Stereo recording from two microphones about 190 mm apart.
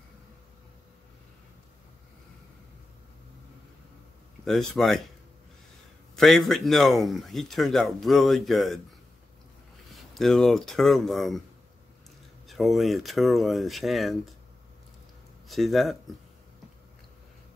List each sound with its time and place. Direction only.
4.5 s speech: centre (ahead or behind)
6.1 s speech: centre (ahead or behind)
9.9 s speech: centre (ahead or behind)
12.4 s speech: centre (ahead or behind)
15.4 s speech: centre (ahead or behind)